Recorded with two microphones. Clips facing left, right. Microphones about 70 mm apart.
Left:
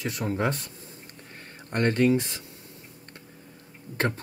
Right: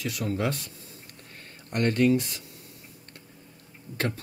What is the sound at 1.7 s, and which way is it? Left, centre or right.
Speech, left.